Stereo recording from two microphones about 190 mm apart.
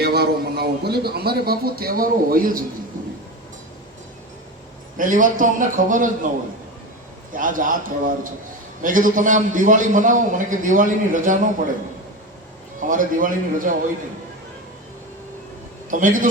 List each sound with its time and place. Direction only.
0.0 s a man's voice: 55° right (ahead or behind)
4.9 s a man's voice: 45° right (ahead or behind)
7.3 s a man's voice: 45° right (ahead or behind)
12.9 s a man's voice: 45° right (ahead or behind)
15.9 s a man's voice: 45° right (ahead or behind)